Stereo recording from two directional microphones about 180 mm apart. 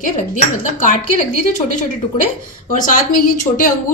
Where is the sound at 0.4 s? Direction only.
45° left (ahead or behind).